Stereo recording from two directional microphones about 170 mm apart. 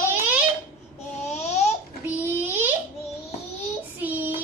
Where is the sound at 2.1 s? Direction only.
10° right (ahead or behind).